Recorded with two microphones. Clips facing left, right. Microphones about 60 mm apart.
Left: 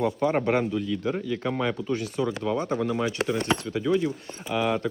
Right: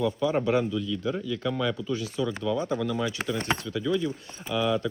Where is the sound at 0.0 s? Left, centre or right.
Left.